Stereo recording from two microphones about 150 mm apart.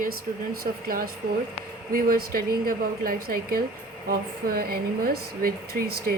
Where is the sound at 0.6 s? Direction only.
80° right.